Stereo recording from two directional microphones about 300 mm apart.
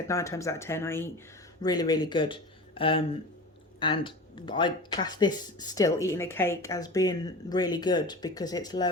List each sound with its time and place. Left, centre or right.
0.1 s speech: centre